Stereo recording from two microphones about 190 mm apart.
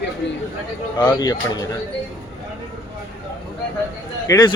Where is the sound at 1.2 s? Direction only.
20° left (ahead or behind).